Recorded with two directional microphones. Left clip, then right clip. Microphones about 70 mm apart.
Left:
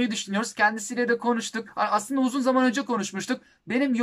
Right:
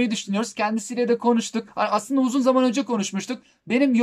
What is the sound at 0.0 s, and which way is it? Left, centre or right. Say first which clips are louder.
Speech: right 2 dB; right.